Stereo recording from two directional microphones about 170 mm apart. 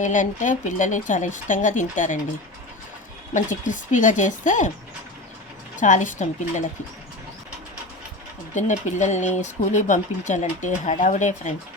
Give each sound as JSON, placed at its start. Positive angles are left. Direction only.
{"t": 0.0, "sound": "speech", "side_deg": 50}
{"t": 3.3, "sound": "speech", "side_deg": 50}
{"t": 5.7, "sound": "speech", "side_deg": 50}
{"t": 8.5, "sound": "speech", "side_deg": 45}